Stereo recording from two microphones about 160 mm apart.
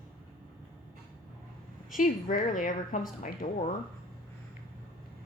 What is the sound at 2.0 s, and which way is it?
A woman's voice, 55° left (ahead or behind).